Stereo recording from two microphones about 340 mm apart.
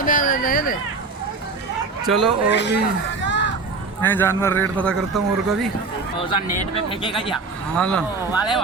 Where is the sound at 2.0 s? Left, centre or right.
Centre.